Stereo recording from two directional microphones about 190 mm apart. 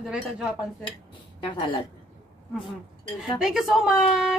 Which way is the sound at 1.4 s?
25° left (ahead or behind).